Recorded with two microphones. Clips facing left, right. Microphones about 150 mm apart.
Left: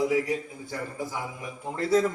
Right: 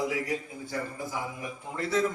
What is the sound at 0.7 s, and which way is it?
Speech, centre (ahead or behind).